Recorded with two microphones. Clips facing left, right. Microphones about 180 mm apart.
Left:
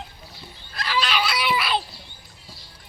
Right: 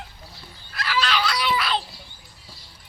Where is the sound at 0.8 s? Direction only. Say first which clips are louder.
Even; 15° left (ahead or behind).